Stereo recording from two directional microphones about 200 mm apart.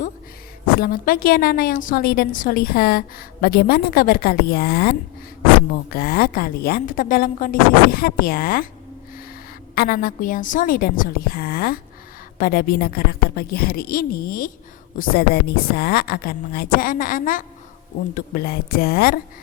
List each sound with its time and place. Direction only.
0.8 s a woman's voice: 45° left (ahead or behind)
9.7 s a woman's voice: 45° left (ahead or behind)